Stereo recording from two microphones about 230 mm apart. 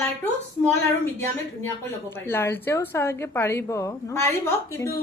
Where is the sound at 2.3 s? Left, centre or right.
Centre.